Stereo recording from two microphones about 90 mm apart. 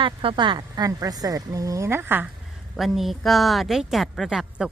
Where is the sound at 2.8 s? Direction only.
Centre (ahead or behind).